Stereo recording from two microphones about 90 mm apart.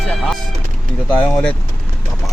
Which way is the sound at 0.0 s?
10° left (ahead or behind).